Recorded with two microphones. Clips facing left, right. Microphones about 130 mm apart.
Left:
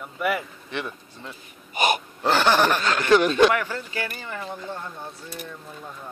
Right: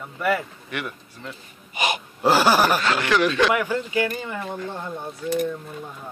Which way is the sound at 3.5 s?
10° right (ahead or behind).